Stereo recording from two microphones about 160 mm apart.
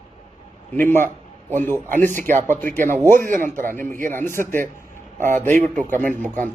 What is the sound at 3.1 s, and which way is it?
Speech, 55° right (ahead or behind).